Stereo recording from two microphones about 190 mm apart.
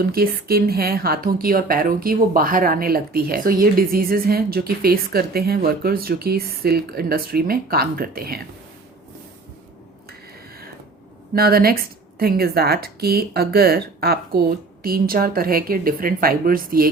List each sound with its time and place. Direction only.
0.0 s a woman's voice: 50° right (ahead or behind)
11.3 s a woman's voice: 50° right (ahead or behind)